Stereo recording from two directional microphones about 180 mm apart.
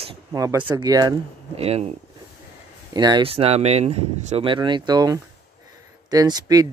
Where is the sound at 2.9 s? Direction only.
25° right (ahead or behind).